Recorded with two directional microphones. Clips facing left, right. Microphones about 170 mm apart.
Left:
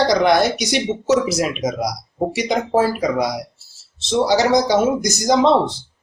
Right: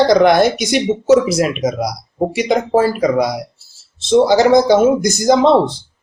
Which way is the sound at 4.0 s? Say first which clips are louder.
Right 6 dB; 55° right (ahead or behind).